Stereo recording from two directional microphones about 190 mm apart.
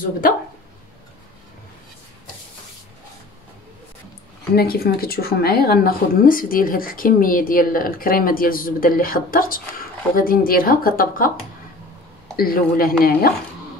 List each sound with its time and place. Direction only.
4.6 s speech: 55° left (ahead or behind)
12.4 s speech: 50° left (ahead or behind)